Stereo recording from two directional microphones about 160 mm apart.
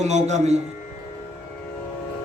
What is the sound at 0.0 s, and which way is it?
Speech, 45° right (ahead or behind).